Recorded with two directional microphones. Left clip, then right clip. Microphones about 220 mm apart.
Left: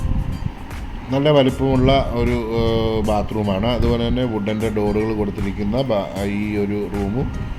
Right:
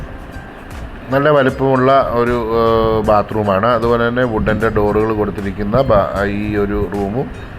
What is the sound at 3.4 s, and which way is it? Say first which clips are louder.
Music: right 8 dB; 20° right (ahead or behind).